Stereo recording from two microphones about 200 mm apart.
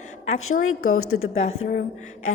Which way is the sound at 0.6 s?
90° left.